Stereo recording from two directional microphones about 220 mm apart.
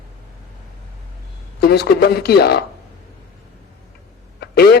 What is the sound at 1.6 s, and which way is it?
A man's voice, 45° left (ahead or behind).